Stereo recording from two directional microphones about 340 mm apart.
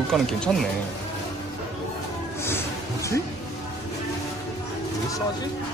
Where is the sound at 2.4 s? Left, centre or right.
Centre.